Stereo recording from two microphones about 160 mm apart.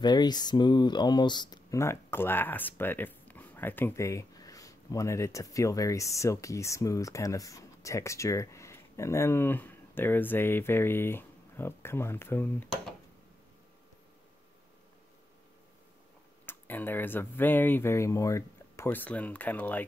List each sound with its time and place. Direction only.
0.0 s speech: 25° left (ahead or behind)
16.4 s speech: 10° left (ahead or behind)